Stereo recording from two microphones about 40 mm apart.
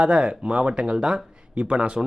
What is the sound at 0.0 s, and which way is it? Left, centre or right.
Speech, right.